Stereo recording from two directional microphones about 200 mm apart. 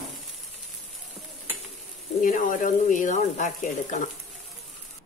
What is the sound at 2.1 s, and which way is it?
Speech, 40° left (ahead or behind).